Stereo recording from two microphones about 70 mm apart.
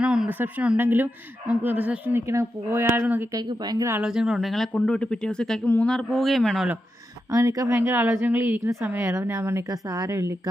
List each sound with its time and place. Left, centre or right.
0.0 s a sound: centre
0.3 s a woman's voice: right
2.2 s speech: right
3.0 s speech: right
3.3 s speech: right
4.0 s speech: centre
4.7 s speech: centre
5.9 s speech: centre
7.3 s speech: right
7.8 s a woman's voice: right
9.6 s speech: right
10.1 s speech: right